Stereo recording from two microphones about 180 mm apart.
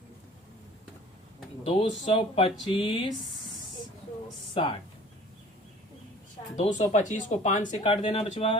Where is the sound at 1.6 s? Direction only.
30° left (ahead or behind).